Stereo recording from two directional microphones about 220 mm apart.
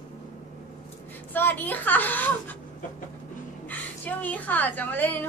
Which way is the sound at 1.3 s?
10° left (ahead or behind).